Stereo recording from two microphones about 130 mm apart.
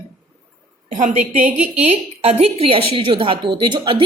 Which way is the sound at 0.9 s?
70° right (ahead or behind).